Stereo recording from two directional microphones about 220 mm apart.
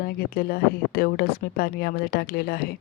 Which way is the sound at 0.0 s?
45° left (ahead or behind).